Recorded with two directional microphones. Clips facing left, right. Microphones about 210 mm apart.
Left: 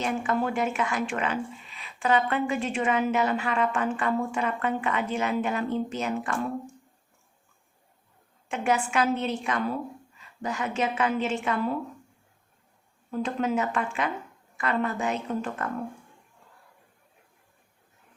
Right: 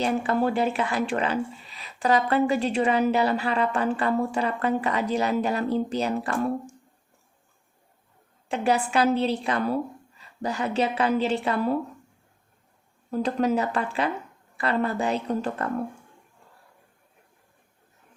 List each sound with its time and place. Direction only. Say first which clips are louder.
0.0 s speech: right 4 dB; 35° right (ahead or behind)
8.4 s speech: right 2 dB; 35° right (ahead or behind)
13.1 s speech: right 4 dB; 40° right (ahead or behind)